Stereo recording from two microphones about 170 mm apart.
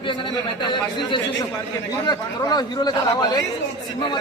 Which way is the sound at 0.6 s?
25° left (ahead or behind).